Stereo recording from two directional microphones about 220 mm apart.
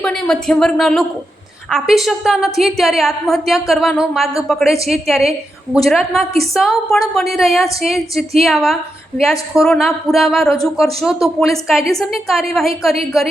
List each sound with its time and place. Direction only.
0.0 s a woman's voice: 5° left (ahead or behind)